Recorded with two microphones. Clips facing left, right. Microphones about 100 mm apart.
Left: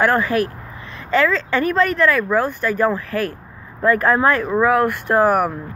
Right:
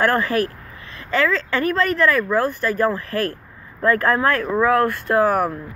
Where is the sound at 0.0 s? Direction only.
15° left (ahead or behind).